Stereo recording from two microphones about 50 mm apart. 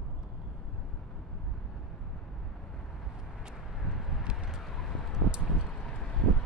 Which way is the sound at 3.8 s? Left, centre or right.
Centre.